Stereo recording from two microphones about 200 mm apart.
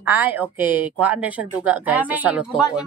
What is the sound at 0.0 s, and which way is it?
A woman's voice, 10° right (ahead or behind).